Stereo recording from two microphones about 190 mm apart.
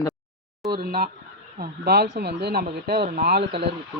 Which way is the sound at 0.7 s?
50° right (ahead or behind).